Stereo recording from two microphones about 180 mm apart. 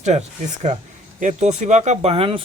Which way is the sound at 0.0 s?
40° right (ahead or behind).